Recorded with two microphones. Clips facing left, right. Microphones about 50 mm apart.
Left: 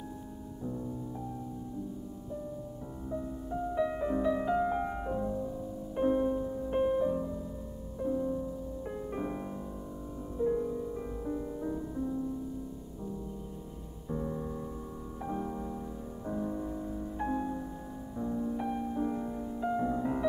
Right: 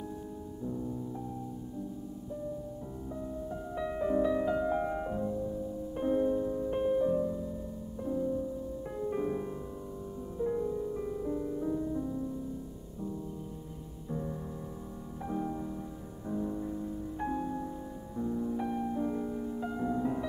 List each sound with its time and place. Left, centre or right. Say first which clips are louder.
3.1 s music: left 2 dB; centre
8.8 s music: right 4 dB; centre
14.0 s music: left 2 dB; centre